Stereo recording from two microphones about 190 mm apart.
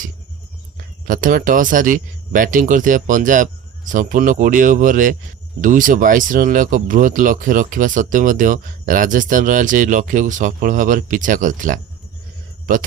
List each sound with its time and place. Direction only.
1.0 s speech: 45° right (ahead or behind)